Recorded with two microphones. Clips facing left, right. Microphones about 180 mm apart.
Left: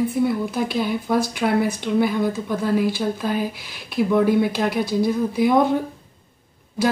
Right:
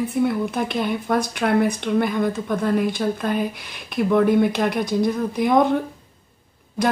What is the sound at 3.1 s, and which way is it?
Speech, 55° right (ahead or behind).